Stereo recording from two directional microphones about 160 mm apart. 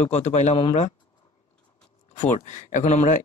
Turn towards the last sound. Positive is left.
turn(degrees=50)  # may be behind; listen again after turning